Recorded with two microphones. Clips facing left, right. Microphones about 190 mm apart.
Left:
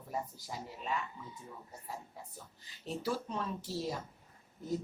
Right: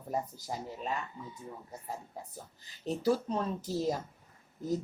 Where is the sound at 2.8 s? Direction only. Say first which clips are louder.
Right 7 dB; 40° right (ahead or behind).